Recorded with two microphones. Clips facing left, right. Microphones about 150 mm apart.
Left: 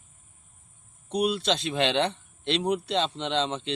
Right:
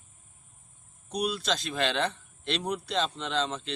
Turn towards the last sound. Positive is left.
turn(degrees=30)  # may be behind; listen again after turning